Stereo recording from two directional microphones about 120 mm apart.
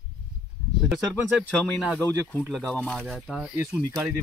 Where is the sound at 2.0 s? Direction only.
15° left (ahead or behind); by 3.5 s centre (ahead or behind).